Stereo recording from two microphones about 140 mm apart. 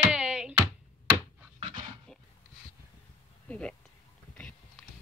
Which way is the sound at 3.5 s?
5° left (ahead or behind).